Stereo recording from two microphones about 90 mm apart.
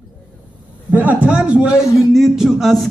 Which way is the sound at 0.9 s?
15° right (ahead or behind).